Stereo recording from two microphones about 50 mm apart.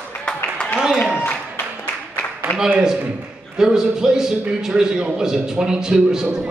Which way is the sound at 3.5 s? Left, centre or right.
Centre.